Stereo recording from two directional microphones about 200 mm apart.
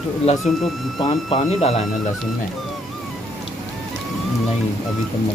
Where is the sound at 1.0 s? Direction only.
30° left (ahead or behind).